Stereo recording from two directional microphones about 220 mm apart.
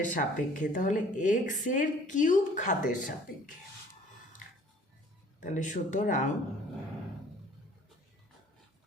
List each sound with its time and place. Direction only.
0.0 s a woman's voice: 35° left (ahead or behind)
5.4 s a woman's voice: 35° left (ahead or behind)